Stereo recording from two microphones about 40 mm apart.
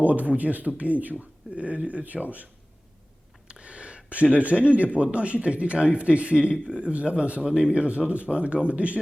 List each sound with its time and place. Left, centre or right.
0.0 s speech: right
3.5 s speech: right